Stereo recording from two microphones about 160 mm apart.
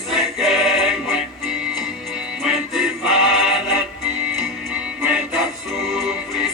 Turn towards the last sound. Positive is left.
turn(degrees=0)  # may be behind; listen again after turning